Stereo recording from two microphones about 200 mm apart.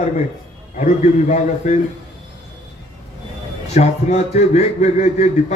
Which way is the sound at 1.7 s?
35° left (ahead or behind).